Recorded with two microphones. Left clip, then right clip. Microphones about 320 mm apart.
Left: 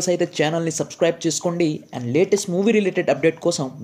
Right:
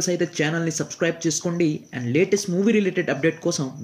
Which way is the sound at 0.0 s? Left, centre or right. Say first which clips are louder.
Left 3 dB; centre.